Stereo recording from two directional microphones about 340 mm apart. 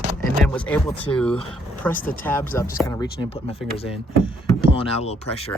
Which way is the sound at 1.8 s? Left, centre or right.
Centre.